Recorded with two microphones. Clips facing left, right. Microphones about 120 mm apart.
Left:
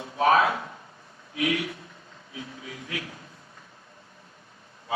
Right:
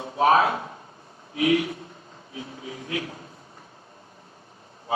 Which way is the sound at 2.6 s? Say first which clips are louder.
Right 6 dB; 30° right (ahead or behind).